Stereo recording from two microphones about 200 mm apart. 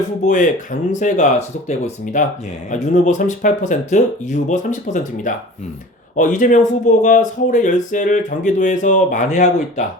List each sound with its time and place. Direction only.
0.3 s speech: 40° left (ahead or behind)